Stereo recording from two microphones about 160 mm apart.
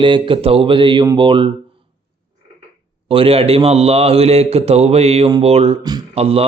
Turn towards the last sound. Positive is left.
turn(degrees=-40)  # may be behind; listen again after turning